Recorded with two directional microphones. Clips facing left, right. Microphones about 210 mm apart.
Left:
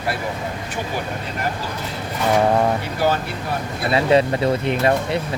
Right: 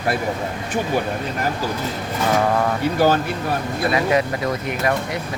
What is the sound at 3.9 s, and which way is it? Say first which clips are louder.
Speech: left 5 dB; 30° left (ahead or behind).